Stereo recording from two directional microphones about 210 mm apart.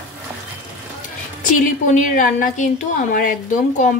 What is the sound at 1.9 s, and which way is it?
A woman's voice, 40° left (ahead or behind).